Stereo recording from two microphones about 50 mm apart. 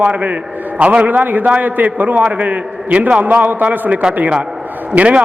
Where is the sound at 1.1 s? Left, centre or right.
Right.